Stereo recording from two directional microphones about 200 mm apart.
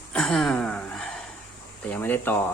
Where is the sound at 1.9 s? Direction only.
10° left (ahead or behind).